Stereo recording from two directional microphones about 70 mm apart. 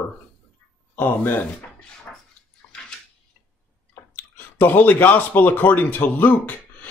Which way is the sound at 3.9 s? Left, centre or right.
Left.